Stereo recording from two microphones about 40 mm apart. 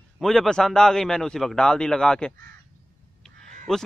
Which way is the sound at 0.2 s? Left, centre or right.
Centre.